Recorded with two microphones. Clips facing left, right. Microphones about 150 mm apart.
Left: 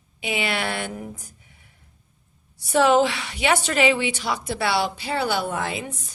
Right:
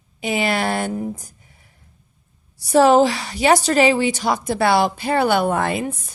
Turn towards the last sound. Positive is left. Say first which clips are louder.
# right 7 dB
turn(degrees=-55)  # may be behind; listen again after turning